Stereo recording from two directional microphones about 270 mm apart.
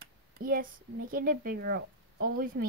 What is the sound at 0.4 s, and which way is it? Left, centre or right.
Speech, right.